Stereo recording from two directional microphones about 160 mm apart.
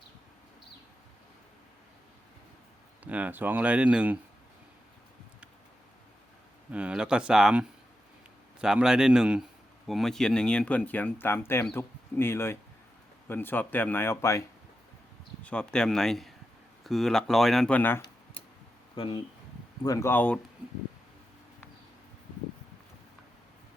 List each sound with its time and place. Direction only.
3.0 s speech: 10° right (ahead or behind)
6.7 s speech: 5° right (ahead or behind)
8.6 s a man's voice: 5° right (ahead or behind); by 14.4 s 15° left (ahead or behind)
15.4 s speech: 5° left (ahead or behind)
18.9 s speech: 30° left (ahead or behind)
19.8 s a man's voice: 20° left (ahead or behind)